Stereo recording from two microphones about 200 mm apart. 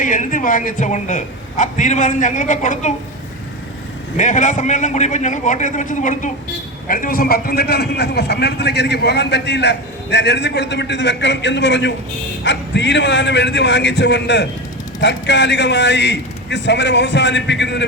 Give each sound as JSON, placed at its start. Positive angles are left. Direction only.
{"t": 0.0, "sound": "a man's voice", "side_deg": 40}
{"t": 4.2, "sound": "a man's voice", "side_deg": 40}